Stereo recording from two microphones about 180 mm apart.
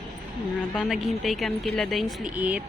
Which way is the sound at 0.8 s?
Centre (ahead or behind).